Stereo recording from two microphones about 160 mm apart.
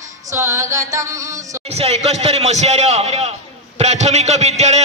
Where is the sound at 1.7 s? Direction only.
40° right (ahead or behind).